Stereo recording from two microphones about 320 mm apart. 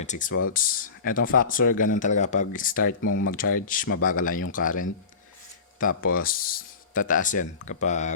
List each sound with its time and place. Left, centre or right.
0.0 s speech: left
6.0 s speech: left